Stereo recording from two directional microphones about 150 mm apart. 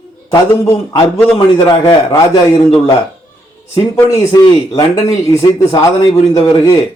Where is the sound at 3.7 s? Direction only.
20° left (ahead or behind).